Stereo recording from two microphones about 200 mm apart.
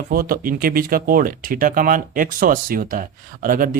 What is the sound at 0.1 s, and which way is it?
Speech, 45° right (ahead or behind).